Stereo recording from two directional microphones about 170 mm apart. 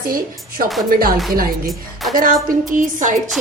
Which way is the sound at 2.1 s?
50° right (ahead or behind).